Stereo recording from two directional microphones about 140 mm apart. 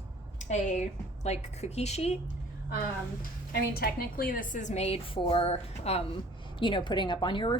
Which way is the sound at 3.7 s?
90° left.